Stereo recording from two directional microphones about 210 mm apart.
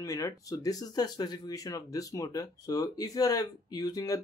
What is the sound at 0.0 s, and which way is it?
Speech, 15° left (ahead or behind).